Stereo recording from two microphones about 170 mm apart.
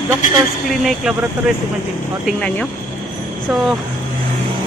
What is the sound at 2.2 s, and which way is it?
Speech, 5° left (ahead or behind).